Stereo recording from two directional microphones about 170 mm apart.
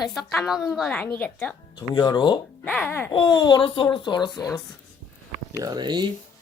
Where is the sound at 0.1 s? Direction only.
Centre (ahead or behind).